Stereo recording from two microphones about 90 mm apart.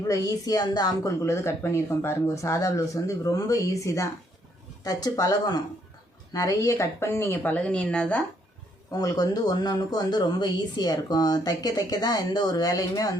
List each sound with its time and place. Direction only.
0.1 s speech: 40° left (ahead or behind)
1.2 s speech: 30° left (ahead or behind)
7.5 s speech: 10° left (ahead or behind)
8.9 s speech: 45° left (ahead or behind)